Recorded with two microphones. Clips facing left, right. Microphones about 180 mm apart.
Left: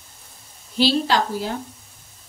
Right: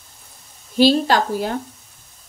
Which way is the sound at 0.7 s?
45° right (ahead or behind).